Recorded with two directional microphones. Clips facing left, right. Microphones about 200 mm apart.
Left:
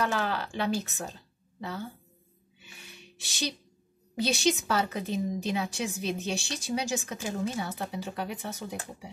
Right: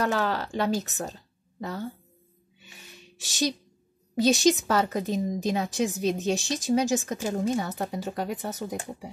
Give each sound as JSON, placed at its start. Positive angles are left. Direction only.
{"t": 0.0, "sound": "speech", "side_deg": -40}
{"t": 4.1, "sound": "speech", "side_deg": -45}